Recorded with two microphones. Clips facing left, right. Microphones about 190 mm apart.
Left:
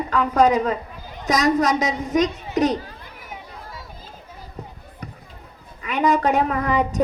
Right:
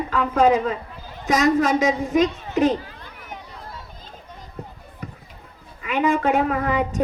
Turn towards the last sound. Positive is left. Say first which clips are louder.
# left 1 dB
turn(degrees=40)  # may be behind; listen again after turning